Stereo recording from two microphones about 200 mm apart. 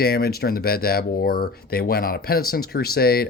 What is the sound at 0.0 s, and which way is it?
Speech, 50° left (ahead or behind).